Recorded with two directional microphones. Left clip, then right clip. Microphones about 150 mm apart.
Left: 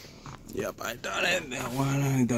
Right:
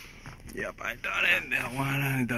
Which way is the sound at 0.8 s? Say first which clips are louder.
Right 3 dB; 40° left (ahead or behind).